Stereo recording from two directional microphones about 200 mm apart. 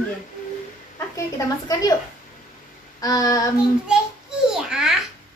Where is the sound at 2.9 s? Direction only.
20° left (ahead or behind).